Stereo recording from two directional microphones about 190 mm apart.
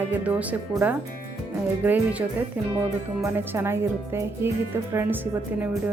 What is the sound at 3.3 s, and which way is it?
Speech, 10° right (ahead or behind).